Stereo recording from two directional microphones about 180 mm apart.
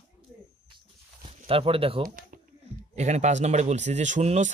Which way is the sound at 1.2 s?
30° right (ahead or behind).